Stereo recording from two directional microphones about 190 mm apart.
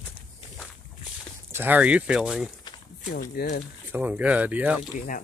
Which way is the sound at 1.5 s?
10° right (ahead or behind).